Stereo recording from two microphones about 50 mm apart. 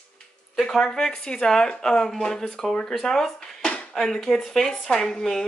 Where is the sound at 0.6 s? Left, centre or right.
Centre.